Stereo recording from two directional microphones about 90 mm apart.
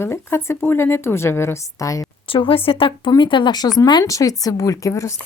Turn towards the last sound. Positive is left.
turn(degrees=35)  # may be behind; listen again after turning